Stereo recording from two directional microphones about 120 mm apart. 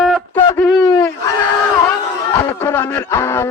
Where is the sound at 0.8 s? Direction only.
30° left (ahead or behind).